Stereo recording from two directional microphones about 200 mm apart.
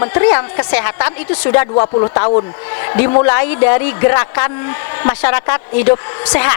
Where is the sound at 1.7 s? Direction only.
25° left (ahead or behind).